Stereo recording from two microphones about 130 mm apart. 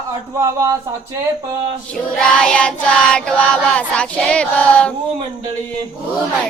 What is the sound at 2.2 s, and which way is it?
Child singing, 5° left (ahead or behind).